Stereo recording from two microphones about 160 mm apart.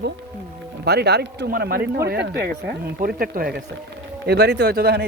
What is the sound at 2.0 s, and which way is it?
Speech, 90° right.